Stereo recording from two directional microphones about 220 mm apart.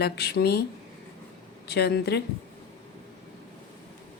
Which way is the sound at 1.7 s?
50° left (ahead or behind).